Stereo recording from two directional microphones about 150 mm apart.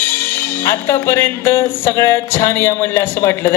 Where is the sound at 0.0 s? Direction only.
15° left (ahead or behind).